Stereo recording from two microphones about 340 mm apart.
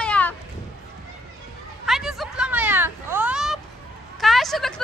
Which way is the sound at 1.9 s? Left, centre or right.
Centre.